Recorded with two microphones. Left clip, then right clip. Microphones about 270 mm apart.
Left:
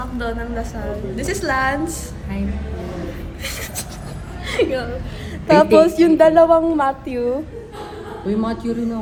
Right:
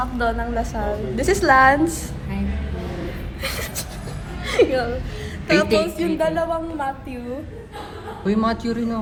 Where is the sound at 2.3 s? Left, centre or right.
Centre.